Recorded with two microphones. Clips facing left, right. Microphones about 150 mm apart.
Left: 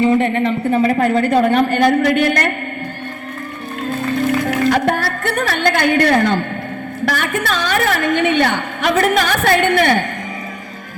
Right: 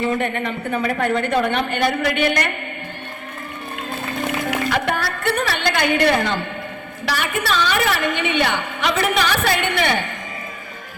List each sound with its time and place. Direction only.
0.0 s a woman's voice: 30° left (ahead or behind); by 2.5 s 45° left (ahead or behind)
4.4 s a woman's voice: 45° left (ahead or behind)